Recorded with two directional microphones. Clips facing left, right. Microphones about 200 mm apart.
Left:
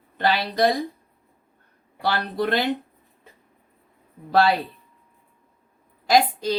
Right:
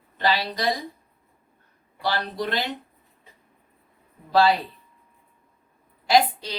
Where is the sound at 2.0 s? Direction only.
55° left (ahead or behind).